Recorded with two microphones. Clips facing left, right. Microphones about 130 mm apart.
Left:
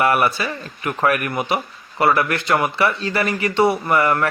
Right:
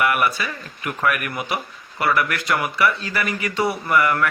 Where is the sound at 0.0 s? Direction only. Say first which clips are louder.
Left 3 dB; 30° left (ahead or behind).